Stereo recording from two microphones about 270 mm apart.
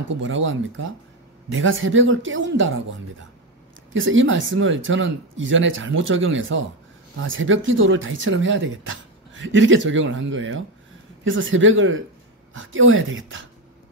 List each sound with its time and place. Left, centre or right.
0.2 s speech: right
3.9 s speech: right